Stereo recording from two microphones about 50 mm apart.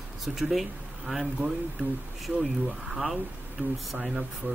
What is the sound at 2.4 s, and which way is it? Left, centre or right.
Speech, centre.